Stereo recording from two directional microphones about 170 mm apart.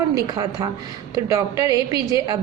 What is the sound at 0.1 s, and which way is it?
A woman's voice, 20° right (ahead or behind).